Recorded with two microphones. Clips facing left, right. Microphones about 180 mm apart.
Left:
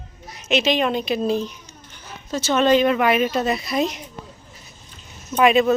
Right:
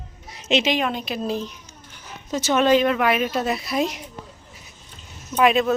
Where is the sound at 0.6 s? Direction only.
5° right (ahead or behind).